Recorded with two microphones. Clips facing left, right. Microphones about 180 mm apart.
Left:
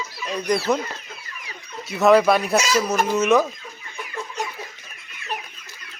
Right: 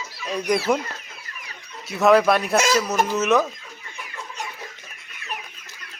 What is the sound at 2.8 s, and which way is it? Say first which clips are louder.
Speech: left 1 dB; 10° left (ahead or behind).